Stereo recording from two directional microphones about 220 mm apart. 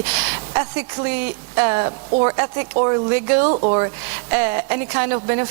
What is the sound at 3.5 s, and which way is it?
Speech, 30° right (ahead or behind).